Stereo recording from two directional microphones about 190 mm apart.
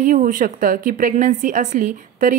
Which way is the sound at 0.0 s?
45° right (ahead or behind).